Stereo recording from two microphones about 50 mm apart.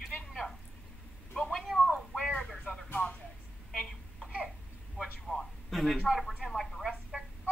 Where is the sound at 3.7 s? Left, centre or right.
Centre.